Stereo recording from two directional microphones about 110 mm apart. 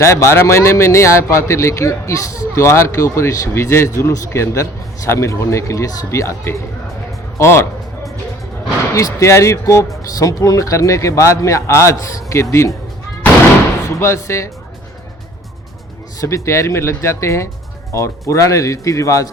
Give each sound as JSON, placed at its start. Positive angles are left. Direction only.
{"t": 0.0, "sound": "speech", "side_deg": 25}
{"t": 9.0, "sound": "speech", "side_deg": 30}
{"t": 14.0, "sound": "speech", "side_deg": 25}
{"t": 16.2, "sound": "speech", "side_deg": 25}